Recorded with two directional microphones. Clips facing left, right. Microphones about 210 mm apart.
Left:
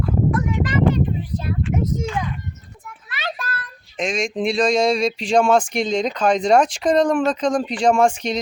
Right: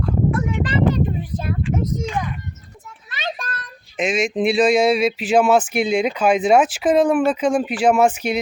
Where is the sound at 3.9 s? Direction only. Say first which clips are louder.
Right 3 dB; 5° right (ahead or behind).